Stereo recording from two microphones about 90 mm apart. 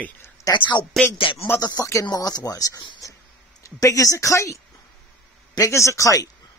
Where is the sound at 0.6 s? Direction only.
55° left (ahead or behind).